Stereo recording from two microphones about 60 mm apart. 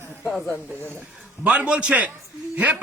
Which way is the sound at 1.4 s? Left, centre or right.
Right.